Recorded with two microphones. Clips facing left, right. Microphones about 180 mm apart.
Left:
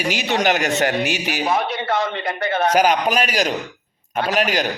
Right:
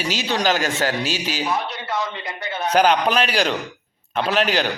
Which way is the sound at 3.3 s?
45° left (ahead or behind).